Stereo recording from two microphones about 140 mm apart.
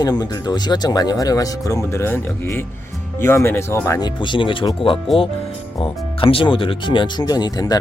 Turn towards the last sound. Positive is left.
turn(degrees=25)  # may be behind; listen again after turning